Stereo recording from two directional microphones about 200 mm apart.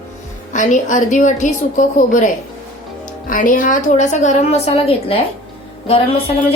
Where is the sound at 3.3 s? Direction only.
40° left (ahead or behind).